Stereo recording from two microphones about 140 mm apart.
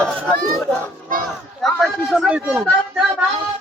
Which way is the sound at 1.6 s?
Centre (ahead or behind).